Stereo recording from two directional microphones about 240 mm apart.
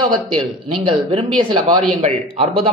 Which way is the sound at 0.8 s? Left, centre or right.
Centre.